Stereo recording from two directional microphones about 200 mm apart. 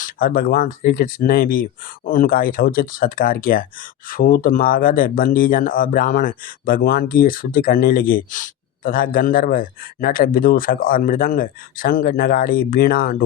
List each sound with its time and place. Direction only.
0.0 s speech: 45° left (ahead or behind)